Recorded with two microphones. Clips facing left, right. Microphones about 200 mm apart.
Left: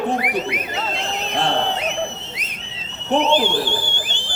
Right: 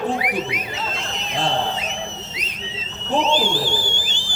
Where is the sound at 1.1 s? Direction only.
60° left (ahead or behind).